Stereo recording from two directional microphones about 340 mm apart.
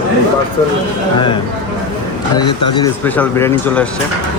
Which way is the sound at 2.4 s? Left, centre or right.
Centre.